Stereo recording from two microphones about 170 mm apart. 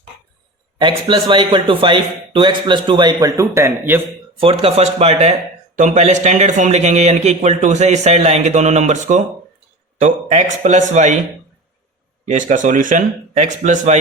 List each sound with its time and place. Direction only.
0.8 s a man's voice: 30° right (ahead or behind)
4.4 s a man's voice: 35° right (ahead or behind)
12.3 s a man's voice: 45° right (ahead or behind)